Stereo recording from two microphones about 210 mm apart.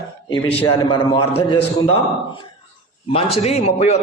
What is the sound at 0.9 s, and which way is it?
A man's voice, 20° left (ahead or behind).